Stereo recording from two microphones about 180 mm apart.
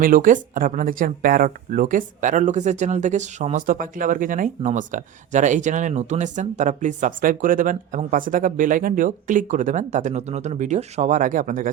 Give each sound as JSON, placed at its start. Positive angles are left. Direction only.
{"t": 0.0, "sound": "speech", "side_deg": -50}